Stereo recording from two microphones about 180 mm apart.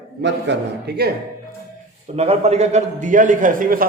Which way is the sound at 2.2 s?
35° right (ahead or behind).